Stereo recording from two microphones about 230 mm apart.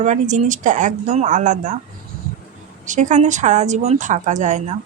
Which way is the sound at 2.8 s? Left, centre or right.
Right.